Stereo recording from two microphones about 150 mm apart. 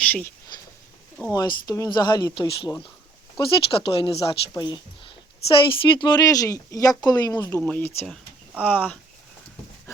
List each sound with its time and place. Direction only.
0.0 s speech: 10° left (ahead or behind)
1.3 s speech: 25° left (ahead or behind)